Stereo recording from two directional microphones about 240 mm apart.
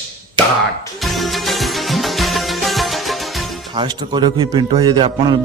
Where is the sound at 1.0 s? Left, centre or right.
Centre.